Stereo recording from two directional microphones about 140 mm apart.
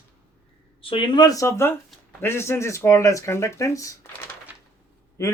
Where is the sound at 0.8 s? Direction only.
35° left (ahead or behind).